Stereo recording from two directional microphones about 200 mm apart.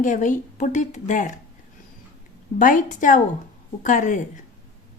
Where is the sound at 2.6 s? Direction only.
40° left (ahead or behind).